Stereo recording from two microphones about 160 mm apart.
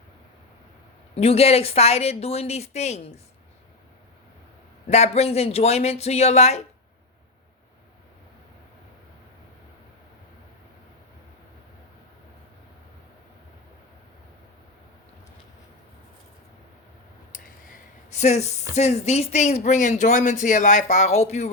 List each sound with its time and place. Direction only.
1.1 s a woman's voice: 40° left (ahead or behind)
4.9 s a woman's voice: 40° left (ahead or behind)
17.3 s a sound: 50° left (ahead or behind)
18.7 s speech: 45° left (ahead or behind)